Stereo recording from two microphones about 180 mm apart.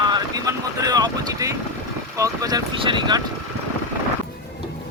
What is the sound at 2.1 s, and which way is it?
Speech, 20° right (ahead or behind).